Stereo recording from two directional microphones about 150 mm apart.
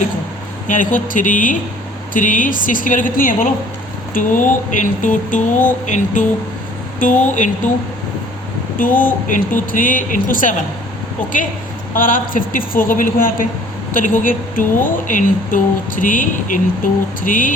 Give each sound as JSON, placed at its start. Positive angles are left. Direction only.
{"t": 0.7, "sound": "speech", "side_deg": 60}
{"t": 8.8, "sound": "speech", "side_deg": 65}
{"t": 11.9, "sound": "a woman's voice", "side_deg": 65}